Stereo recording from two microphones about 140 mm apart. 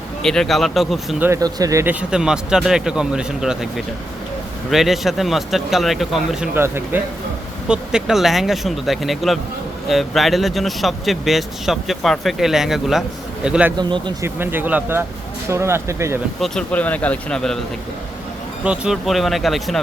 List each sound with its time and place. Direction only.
0.2 s a man's voice: 5° left (ahead or behind)
1.2 s a man's voice: 20° right (ahead or behind); by 6.5 s centre (ahead or behind)
6.5 s speech: 15° right (ahead or behind)
7.7 s a man's voice: 5° right (ahead or behind)
13.7 s speech: 35° right (ahead or behind)
14.2 s speech: 15° right (ahead or behind)
16.4 s speech: 10° left (ahead or behind)
18.6 s a man's voice: 5° right (ahead or behind)